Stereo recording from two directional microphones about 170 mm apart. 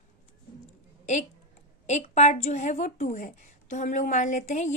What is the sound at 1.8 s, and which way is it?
A woman's voice, 45° left (ahead or behind).